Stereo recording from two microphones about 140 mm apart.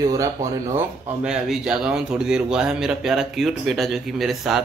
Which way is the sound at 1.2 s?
5° right (ahead or behind).